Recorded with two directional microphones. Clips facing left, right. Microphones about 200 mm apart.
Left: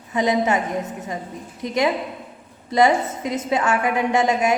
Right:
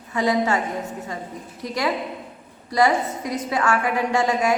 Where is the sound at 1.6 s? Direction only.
20° left (ahead or behind).